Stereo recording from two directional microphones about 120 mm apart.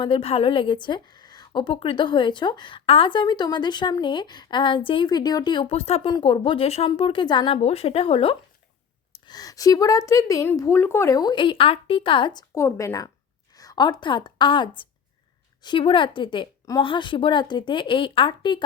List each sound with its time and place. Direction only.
0.0 s a woman's voice: 45° left (ahead or behind)
6.1 s speech: 40° left (ahead or behind)
7.6 s speech: 55° left (ahead or behind)
9.2 s a woman's voice: 35° left (ahead or behind)
12.5 s a woman's voice: 25° left (ahead or behind); by 18.6 s 40° left (ahead or behind)